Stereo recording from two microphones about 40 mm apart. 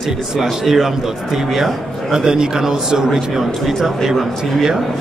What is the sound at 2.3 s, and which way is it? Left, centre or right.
Speech, centre.